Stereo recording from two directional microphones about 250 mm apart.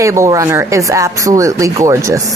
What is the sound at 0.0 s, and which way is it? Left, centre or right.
Speech, centre.